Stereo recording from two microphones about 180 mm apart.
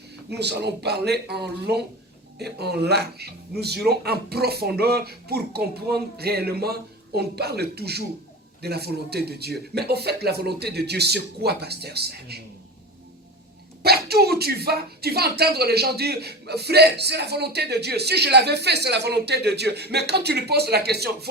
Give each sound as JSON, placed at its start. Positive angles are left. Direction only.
{"t": 0.3, "sound": "speech", "side_deg": -65}
{"t": 13.8, "sound": "speech", "side_deg": -60}